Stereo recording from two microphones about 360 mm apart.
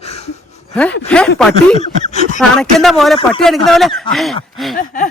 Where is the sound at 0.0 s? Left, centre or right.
Centre.